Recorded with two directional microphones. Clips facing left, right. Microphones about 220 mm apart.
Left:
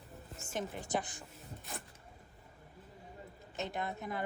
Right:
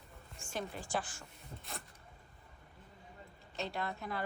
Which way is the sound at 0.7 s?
20° left (ahead or behind).